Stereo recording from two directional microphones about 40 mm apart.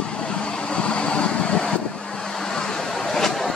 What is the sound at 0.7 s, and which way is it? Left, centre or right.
Vehicle, left.